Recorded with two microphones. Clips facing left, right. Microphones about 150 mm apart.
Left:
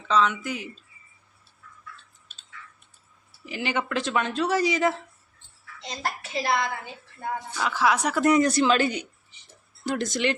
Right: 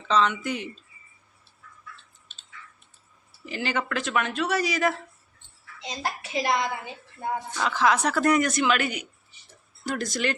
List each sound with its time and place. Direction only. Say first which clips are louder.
0.1 s speech: even; 5° left (ahead or behind)
3.4 s speech: even; 15° left (ahead or behind)
5.8 s a woman's voice: even; 5° right (ahead or behind)
7.5 s speech: even; 10° left (ahead or behind)
8.4 s speech: left 3 dB; 30° left (ahead or behind)